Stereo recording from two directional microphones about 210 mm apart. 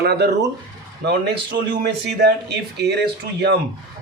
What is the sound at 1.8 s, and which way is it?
Speech, 50° right (ahead or behind).